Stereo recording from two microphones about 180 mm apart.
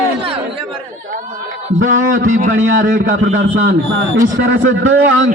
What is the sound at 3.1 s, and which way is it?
Speech, 90° right.